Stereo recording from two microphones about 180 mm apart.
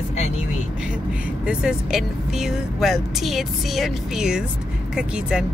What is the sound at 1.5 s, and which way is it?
Speech, 5° right (ahead or behind).